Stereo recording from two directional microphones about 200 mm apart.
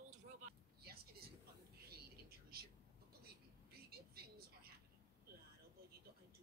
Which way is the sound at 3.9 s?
50° right (ahead or behind).